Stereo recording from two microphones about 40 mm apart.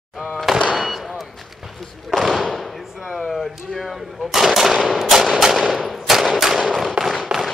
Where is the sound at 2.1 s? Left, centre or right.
Centre.